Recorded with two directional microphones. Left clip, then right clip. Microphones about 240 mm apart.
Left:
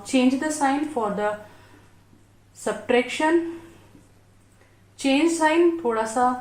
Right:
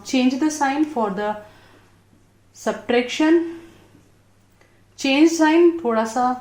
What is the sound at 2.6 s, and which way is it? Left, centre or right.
Speech, right.